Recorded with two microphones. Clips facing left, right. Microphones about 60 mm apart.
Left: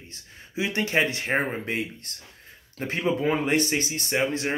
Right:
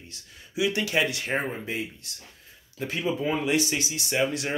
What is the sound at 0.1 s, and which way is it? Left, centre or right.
Speech, left.